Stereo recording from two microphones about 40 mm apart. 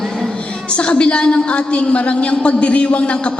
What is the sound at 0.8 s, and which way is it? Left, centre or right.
A woman's voice, left.